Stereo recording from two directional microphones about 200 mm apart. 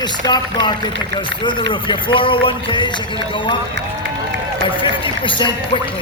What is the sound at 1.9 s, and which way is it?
Speech, 25° left (ahead or behind).